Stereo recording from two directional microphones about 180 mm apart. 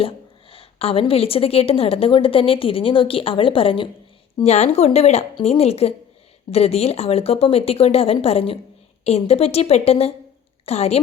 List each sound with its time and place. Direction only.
0.5 s a woman's voice: 30° left (ahead or behind)